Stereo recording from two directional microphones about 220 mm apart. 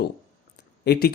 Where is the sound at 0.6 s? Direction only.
45° left (ahead or behind).